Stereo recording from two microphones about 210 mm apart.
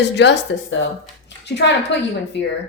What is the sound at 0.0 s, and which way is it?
Speech, 55° left (ahead or behind).